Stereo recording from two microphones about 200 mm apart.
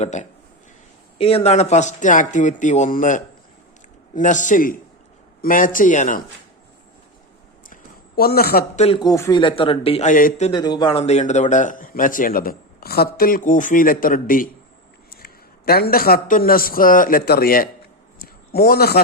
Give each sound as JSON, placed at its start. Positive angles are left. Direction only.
{"t": 0.0, "sound": "a man's voice", "side_deg": 35}
{"t": 7.7, "sound": "a sound", "side_deg": 50}
{"t": 8.7, "sound": "speech", "side_deg": 35}
{"t": 9.0, "sound": "speech", "side_deg": 15}
{"t": 10.5, "sound": "a man's voice", "side_deg": 20}